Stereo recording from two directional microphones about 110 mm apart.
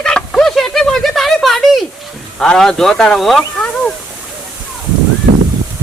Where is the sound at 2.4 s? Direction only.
5° left (ahead or behind).